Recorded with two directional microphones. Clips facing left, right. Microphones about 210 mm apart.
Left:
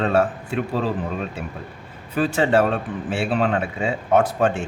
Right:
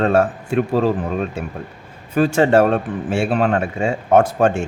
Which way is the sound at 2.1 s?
45° right (ahead or behind).